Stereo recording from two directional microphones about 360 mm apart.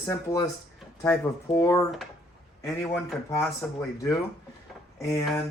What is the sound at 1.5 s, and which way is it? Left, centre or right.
Speech, centre.